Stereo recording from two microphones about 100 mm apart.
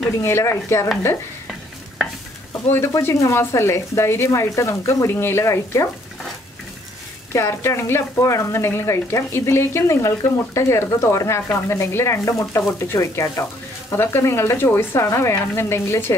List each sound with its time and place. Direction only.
0.2 s speech: 25° left (ahead or behind)
2.7 s speech: 25° left (ahead or behind)
7.3 s speech: 25° left (ahead or behind)